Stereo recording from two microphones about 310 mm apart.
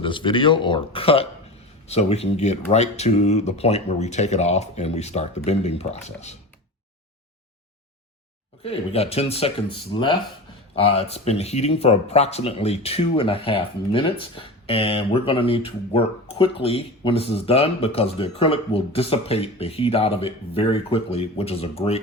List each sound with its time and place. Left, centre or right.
0.0 s speech: centre
8.6 s speech: centre